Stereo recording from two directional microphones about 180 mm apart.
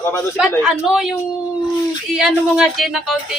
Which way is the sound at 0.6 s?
Centre (ahead or behind).